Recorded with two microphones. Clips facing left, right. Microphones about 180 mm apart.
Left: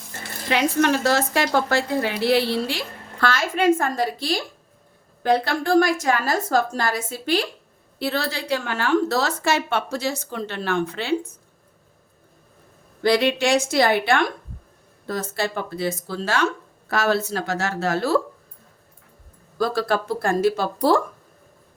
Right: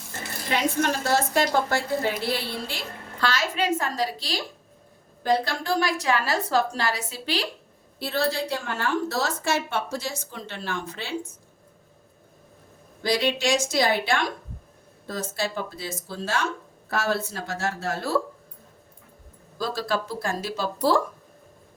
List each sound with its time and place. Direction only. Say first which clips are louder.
0.5 s a woman's voice: left 5 dB; 80° left
3.2 s a woman's voice: left 6 dB; 50° left (ahead or behind)
7.9 s a woman's voice: even; 70° left (ahead or behind)
13.0 s a woman's voice: left 5 dB; 60° left (ahead or behind); by 18.2 s 75° left (ahead or behind)
19.5 s speech: left 5 dB; 55° left (ahead or behind)